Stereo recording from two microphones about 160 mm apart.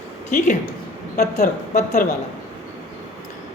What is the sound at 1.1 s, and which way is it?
Speech, 70° left (ahead or behind).